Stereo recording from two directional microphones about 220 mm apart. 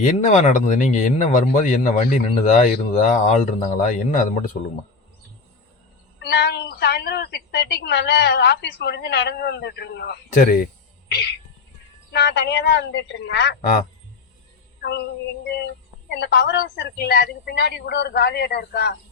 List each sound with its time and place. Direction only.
0.0 s speech: 35° left (ahead or behind)
6.2 s a woman's voice: 50° left (ahead or behind)
11.1 s music: 50° left (ahead or behind)
12.1 s a woman's voice: 50° left (ahead or behind)
14.8 s a sound: 50° left (ahead or behind)
16.1 s a woman's voice: 50° left (ahead or behind)